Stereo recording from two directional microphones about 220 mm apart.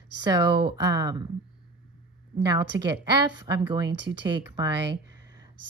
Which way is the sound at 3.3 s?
20° right (ahead or behind).